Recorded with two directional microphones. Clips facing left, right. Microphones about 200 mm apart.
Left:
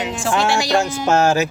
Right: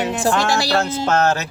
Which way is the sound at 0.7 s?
15° left (ahead or behind).